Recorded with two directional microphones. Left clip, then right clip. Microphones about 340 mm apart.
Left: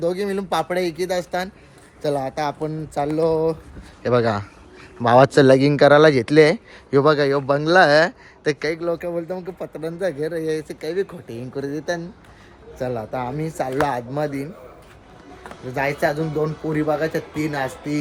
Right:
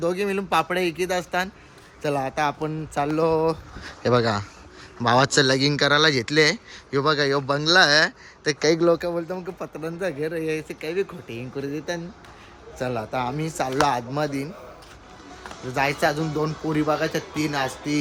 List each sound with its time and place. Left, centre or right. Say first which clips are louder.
0.0 s speech: left 2 dB; centre
8.8 s speech: right 4 dB; right
9.2 s speech: left 2 dB; centre
15.7 s a man's voice: left 1 dB; centre